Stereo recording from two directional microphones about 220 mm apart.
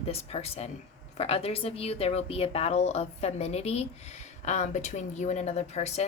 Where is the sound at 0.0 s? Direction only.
30° left (ahead or behind).